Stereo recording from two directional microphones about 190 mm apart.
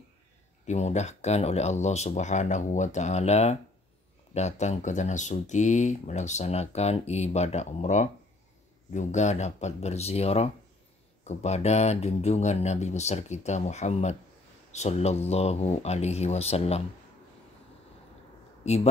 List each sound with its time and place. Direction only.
0.7 s speech: 35° left (ahead or behind)